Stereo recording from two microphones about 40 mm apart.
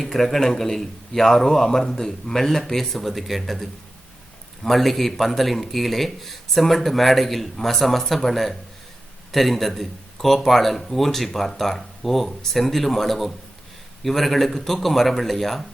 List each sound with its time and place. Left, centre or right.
0.0 s speech: centre